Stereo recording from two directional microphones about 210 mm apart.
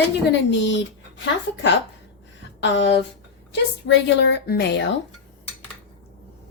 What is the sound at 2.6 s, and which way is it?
A woman's voice, 55° left (ahead or behind).